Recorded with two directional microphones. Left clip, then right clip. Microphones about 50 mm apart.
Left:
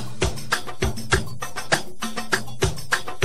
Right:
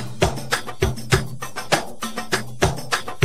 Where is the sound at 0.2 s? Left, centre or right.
Left.